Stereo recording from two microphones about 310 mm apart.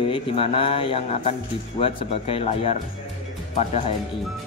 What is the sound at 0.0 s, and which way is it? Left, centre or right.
Speech, centre.